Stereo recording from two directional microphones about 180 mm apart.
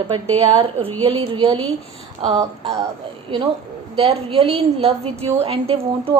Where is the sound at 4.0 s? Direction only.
35° right (ahead or behind).